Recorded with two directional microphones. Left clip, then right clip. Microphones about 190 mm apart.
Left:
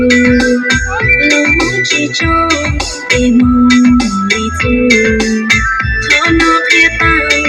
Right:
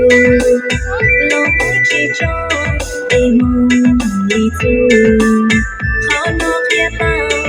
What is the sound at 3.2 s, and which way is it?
Music, 15° right (ahead or behind).